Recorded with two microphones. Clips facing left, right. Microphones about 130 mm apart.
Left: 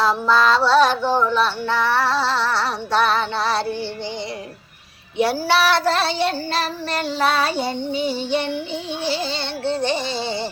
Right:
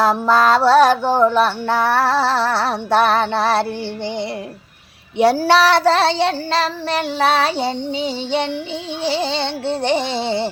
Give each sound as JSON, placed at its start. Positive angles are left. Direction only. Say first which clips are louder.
{"t": 0.0, "sound": "music", "louder": "right 3 dB", "side_deg": -50}
{"t": 1.0, "sound": "speech", "louder": "right 4 dB", "side_deg": -15}
{"t": 1.3, "sound": "music", "louder": "right 3 dB", "side_deg": -50}
{"t": 5.1, "sound": "child singing", "louder": "right 5 dB", "side_deg": -75}
{"t": 7.2, "sound": "music", "louder": "right 3 dB", "side_deg": -75}
{"t": 7.5, "sound": "child singing", "louder": "right 2 dB", "side_deg": -25}
{"t": 9.2, "sound": "music", "louder": "right 3 dB", "side_deg": -80}